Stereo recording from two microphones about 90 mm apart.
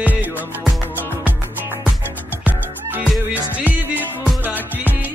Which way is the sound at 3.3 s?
20° right (ahead or behind).